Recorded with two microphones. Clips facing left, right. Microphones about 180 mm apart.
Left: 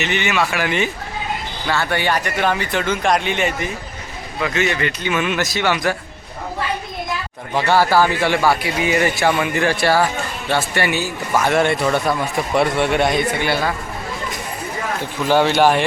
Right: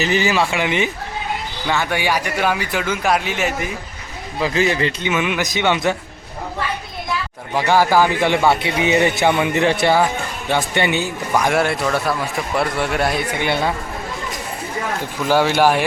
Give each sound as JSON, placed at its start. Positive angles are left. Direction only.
{"t": 0.0, "sound": "speech", "side_deg": -35}
{"t": 4.4, "sound": "speech", "side_deg": -30}
{"t": 5.1, "sound": "speech", "side_deg": -15}
{"t": 7.5, "sound": "speech", "side_deg": -15}
{"t": 11.4, "sound": "speech", "side_deg": -5}
{"t": 13.4, "sound": "speech", "side_deg": -20}
{"t": 15.3, "sound": "speech", "side_deg": -10}